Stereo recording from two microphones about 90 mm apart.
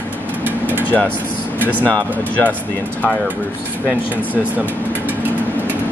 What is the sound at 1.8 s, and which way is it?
Speech, 15° left (ahead or behind).